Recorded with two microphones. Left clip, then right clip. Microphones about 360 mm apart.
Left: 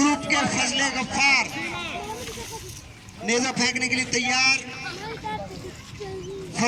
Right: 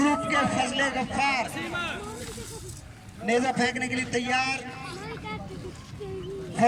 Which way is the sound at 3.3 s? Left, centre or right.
Right.